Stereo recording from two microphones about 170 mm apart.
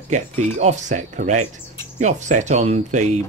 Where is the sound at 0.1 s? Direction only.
40° right (ahead or behind).